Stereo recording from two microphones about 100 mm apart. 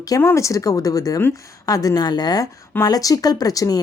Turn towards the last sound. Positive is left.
turn(degrees=35)  # may be behind; listen again after turning